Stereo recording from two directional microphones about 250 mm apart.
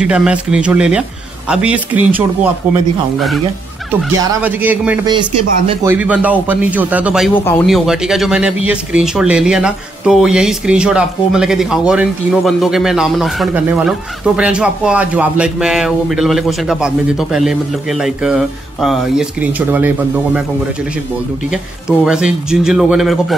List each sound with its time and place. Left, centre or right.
0.0 s a man's voice: centre
5.1 s speech: centre
5.9 s a man's voice: centre
7.3 s a man's voice: centre
21.5 s a man's voice: centre